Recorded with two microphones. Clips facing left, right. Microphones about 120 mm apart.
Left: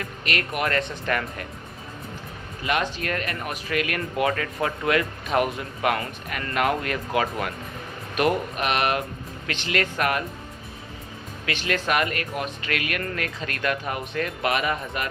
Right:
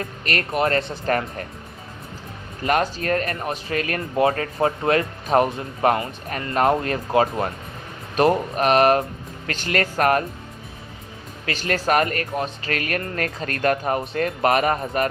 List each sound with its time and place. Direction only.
0.0 s speech: 35° right (ahead or behind)
2.6 s speech: 40° right (ahead or behind)
11.4 s speech: 40° right (ahead or behind)